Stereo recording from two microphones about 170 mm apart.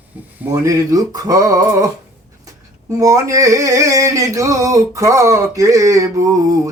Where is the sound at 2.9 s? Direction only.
20° right (ahead or behind).